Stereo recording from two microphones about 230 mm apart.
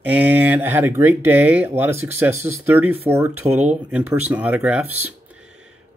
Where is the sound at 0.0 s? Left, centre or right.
Centre.